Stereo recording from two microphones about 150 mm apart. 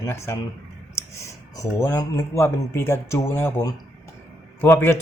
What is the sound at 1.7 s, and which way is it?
Speech, 20° left (ahead or behind).